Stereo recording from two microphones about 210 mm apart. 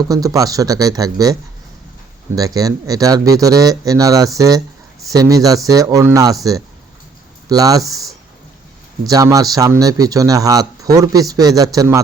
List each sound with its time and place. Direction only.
0.0 s speech: 15° right (ahead or behind)
7.4 s speech: 15° right (ahead or behind)
9.0 s speech: 15° right (ahead or behind)